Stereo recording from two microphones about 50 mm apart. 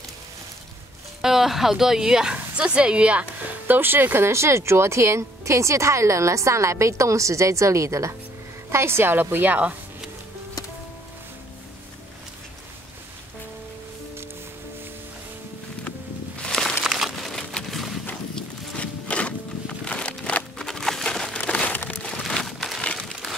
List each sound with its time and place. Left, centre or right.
1.2 s speech: centre; by 3.5 s right
3.6 s speech: right
8.6 s a woman's voice: right
9.5 s speech: right
16.4 s crumpling: centre
16.8 s crumpling: centre
17.1 s a sound: centre
18.8 s a sound: left
20.5 s a sound: centre
21.0 s crumpling: centre
21.5 s crumpling: left
22.3 s a sound: centre
22.8 s crumpling: centre